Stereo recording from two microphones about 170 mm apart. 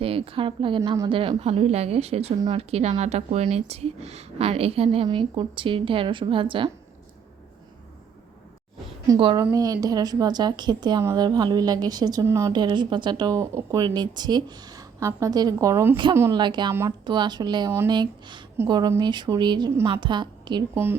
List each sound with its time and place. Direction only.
0.0 s a woman's voice: 35° right (ahead or behind)
9.3 s a woman's voice: 20° right (ahead or behind)
16.4 s a woman's voice: 25° right (ahead or behind)